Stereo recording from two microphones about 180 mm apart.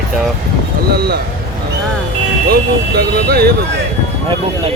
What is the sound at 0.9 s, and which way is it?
Speech, 65° right (ahead or behind).